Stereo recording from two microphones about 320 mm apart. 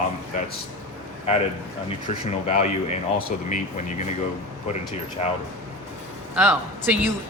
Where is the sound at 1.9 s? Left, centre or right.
Left.